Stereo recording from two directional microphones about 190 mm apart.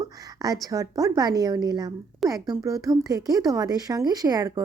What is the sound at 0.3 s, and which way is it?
A woman's voice, 20° right (ahead or behind).